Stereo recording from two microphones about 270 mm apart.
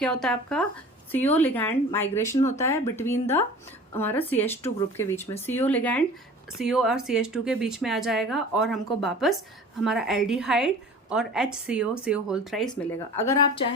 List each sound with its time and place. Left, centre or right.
0.0 s speech: centre